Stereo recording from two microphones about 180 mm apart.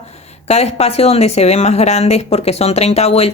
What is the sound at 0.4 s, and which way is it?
Speech, 35° left (ahead or behind).